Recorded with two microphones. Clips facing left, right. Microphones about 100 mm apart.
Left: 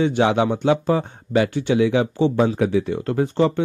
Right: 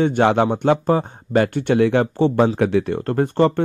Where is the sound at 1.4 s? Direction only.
55° right (ahead or behind).